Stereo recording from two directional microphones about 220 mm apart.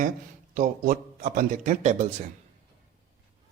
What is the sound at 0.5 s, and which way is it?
Speech, 35° right (ahead or behind).